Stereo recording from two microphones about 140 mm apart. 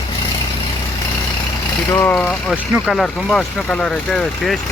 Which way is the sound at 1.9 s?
15° left (ahead or behind).